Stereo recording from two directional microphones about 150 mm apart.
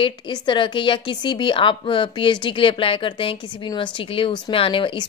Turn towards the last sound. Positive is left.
turn(degrees=35)  # may be behind; listen again after turning